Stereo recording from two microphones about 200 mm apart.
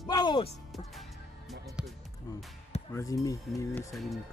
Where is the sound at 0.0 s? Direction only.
20° left (ahead or behind).